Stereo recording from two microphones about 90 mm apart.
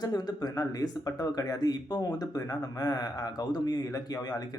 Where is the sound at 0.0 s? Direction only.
45° left (ahead or behind).